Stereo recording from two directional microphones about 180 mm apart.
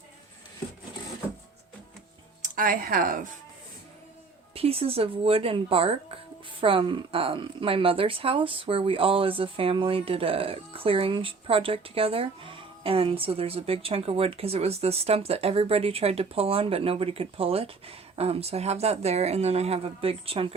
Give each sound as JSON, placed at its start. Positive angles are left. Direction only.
{"t": 2.4, "sound": "speech", "side_deg": -50}
{"t": 4.5, "sound": "a woman's voice", "side_deg": -35}